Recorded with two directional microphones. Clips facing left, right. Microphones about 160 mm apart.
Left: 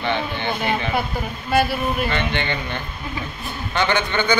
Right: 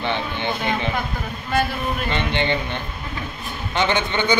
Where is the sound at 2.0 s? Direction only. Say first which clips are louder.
Right 1 dB; 25° right (ahead or behind).